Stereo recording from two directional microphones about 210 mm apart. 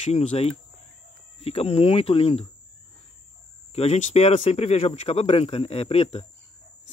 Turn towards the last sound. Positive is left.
turn(degrees=30)  # may be behind; listen again after turning